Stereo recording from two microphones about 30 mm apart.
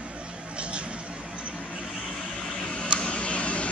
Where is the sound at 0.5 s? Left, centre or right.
Right.